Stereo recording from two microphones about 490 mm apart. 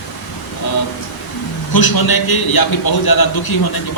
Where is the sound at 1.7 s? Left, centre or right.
Left.